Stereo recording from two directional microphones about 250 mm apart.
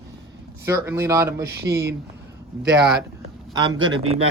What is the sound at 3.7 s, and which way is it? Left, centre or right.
Speech, right.